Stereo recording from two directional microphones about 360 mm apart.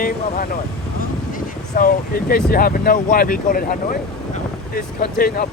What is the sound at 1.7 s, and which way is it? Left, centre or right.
Speech, left.